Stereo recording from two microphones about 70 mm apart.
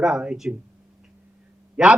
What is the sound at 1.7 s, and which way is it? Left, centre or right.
Speech, centre.